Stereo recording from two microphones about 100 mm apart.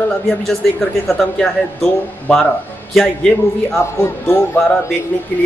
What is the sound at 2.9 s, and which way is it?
Speech, centre (ahead or behind).